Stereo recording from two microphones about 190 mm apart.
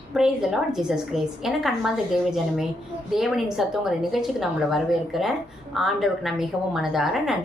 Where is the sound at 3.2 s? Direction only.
Centre (ahead or behind).